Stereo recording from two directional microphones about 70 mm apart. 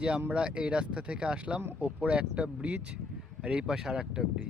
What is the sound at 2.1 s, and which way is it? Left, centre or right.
Speech, centre.